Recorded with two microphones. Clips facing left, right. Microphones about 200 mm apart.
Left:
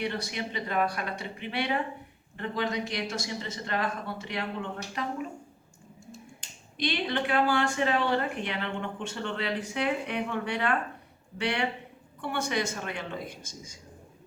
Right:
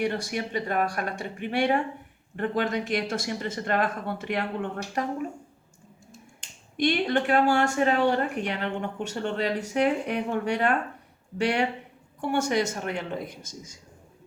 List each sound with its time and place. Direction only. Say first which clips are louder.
0.0 s speech: right 4 dB; 45° right (ahead or behind)
6.7 s speech: right 6 dB; 45° right (ahead or behind)
12.2 s speech: right 5 dB; 45° right (ahead or behind)